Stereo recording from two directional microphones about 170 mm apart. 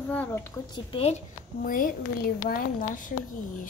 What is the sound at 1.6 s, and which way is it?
Speech, 55° left (ahead or behind).